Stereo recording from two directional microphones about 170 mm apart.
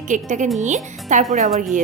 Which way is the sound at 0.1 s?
45° right (ahead or behind).